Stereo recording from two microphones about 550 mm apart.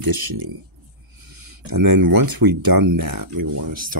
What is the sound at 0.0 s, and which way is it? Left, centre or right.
Speech, right.